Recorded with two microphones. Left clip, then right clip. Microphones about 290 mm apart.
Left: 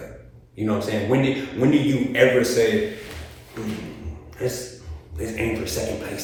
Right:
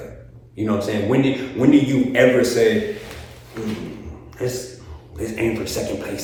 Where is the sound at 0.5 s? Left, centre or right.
Centre.